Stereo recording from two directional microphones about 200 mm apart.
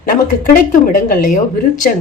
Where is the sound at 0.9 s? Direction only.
40° left (ahead or behind).